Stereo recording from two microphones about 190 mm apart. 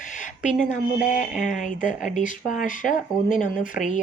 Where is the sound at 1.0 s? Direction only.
40° left (ahead or behind).